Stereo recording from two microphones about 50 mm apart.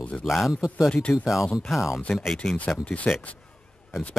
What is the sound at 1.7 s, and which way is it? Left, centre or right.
Speech, centre.